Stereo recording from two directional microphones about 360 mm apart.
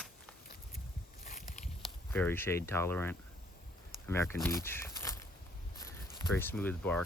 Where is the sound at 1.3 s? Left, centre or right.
Left.